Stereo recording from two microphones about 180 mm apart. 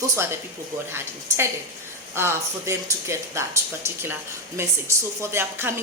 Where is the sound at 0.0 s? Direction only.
15° right (ahead or behind).